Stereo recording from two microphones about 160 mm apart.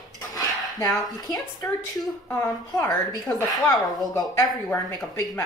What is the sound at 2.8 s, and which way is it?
A woman's voice, 20° left (ahead or behind).